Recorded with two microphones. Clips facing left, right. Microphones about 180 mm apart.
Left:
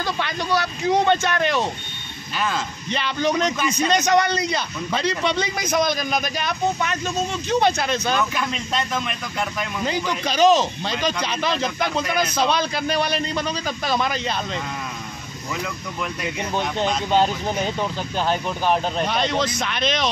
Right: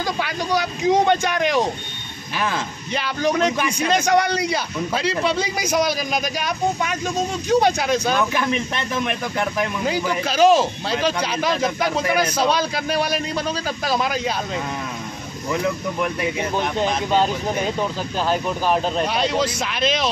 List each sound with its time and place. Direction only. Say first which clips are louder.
0.0 s a man's voice: right 1 dB; 15° right (ahead or behind)
2.9 s a man's voice: right 1 dB; 10° right (ahead or behind)
8.3 s speech: right 4 dB; 60° right (ahead or behind)
9.8 s a man's voice: right 2 dB; 10° right (ahead or behind)
18.3 s speech: right 1 dB; 5° right (ahead or behind)